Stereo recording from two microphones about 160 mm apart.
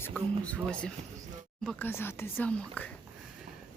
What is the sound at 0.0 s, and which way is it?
Speech, 10° left (ahead or behind).